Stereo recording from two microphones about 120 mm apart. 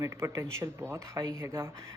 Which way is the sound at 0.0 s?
25° right (ahead or behind).